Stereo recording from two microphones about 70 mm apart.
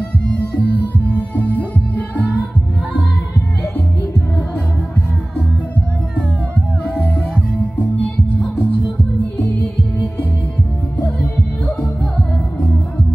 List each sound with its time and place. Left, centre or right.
0.3 s music: left
7.0 s music: centre
8.4 s music: centre